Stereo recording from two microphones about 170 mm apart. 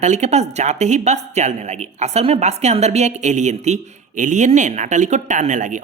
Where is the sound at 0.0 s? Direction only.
45° right (ahead or behind).